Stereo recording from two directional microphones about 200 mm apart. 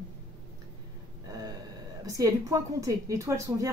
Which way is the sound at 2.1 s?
15° right (ahead or behind).